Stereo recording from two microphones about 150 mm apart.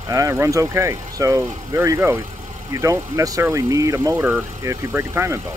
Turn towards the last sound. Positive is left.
turn(degrees=-15)  # may be behind; listen again after turning